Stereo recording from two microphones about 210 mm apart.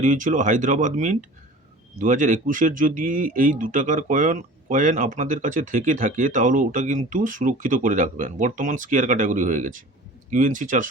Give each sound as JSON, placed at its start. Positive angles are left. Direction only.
{"t": 0.0, "sound": "speech", "side_deg": -35}